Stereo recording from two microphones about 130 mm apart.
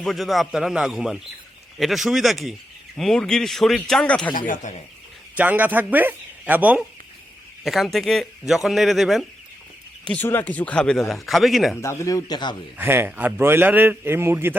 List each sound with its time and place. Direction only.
0.0 s speech: centre (ahead or behind)
4.4 s speech: 90° left
5.4 s a man's voice: 15° right (ahead or behind)
7.6 s speech: centre (ahead or behind)
11.8 s speech: 20° left (ahead or behind)
12.7 s a man's voice: 15° right (ahead or behind)